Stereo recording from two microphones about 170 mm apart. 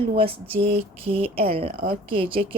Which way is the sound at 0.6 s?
35° right (ahead or behind).